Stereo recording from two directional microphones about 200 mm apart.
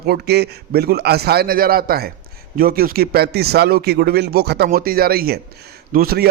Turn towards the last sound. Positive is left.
turn(degrees=-50)  # may be behind; listen again after turning